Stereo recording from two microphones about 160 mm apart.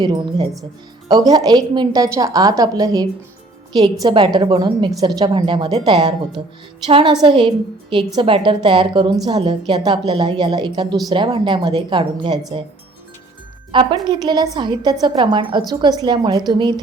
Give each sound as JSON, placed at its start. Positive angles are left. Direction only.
{"t": 0.0, "sound": "a woman's voice", "side_deg": -25}
{"t": 13.7, "sound": "a woman's voice", "side_deg": -30}